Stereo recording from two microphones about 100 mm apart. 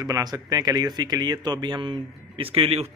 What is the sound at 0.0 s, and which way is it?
Speech, 40° right (ahead or behind).